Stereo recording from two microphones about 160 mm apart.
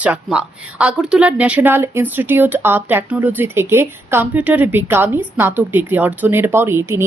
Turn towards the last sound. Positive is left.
turn(degrees=-15)  # may be behind; listen again after turning